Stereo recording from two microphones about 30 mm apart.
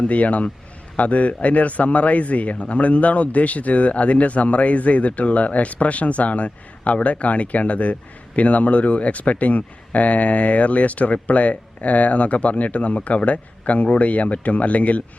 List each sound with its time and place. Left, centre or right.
0.0 s a man's voice: left